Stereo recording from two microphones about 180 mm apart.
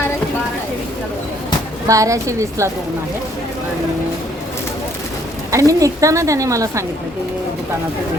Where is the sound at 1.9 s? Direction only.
15° right (ahead or behind).